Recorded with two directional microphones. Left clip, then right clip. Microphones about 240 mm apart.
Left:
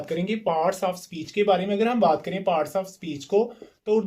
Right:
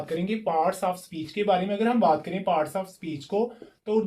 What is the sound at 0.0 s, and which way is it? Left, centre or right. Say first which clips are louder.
Speech: left 2 dB; left.